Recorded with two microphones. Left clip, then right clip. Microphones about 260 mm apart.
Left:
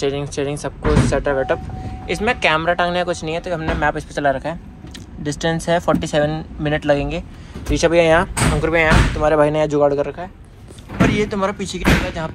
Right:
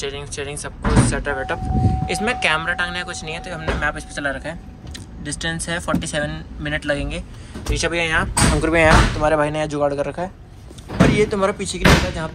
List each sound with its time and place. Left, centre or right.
0.0 s speech: centre
8.5 s speech: centre